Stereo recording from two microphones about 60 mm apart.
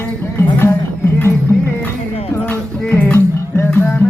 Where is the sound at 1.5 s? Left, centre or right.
Left.